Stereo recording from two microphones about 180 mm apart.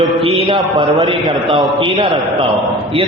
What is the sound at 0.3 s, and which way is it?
Mantra, 30° right (ahead or behind).